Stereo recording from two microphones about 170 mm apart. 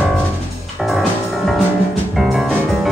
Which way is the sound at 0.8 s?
Centre (ahead or behind).